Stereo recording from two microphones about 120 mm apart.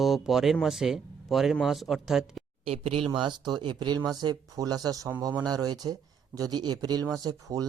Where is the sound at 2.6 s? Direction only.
55° right (ahead or behind).